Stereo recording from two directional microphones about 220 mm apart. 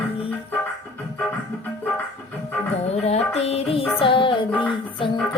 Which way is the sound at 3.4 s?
25° left (ahead or behind).